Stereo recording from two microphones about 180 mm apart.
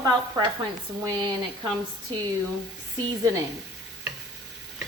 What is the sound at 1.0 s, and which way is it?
Speech, 20° right (ahead or behind).